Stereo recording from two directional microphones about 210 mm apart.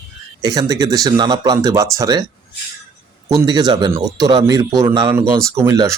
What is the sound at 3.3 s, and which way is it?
Speech, 15° right (ahead or behind).